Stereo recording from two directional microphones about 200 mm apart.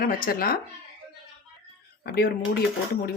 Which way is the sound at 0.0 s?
45° left (ahead or behind).